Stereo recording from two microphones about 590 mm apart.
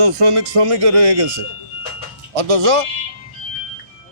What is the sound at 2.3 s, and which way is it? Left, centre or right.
Speech, right.